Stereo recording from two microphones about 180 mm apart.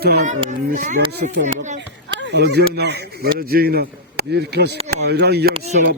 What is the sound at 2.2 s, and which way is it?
Speech, 70° right (ahead or behind).